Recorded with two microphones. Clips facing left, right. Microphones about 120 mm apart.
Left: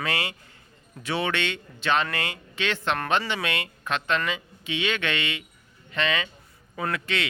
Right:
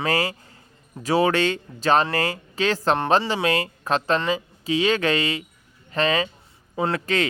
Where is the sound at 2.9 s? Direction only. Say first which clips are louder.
Right 5 dB; 25° right (ahead or behind).